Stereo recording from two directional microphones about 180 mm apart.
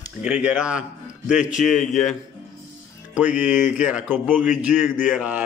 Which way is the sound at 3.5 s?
45° left (ahead or behind).